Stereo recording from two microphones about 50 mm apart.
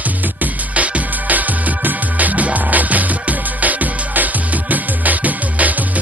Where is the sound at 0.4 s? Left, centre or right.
Right.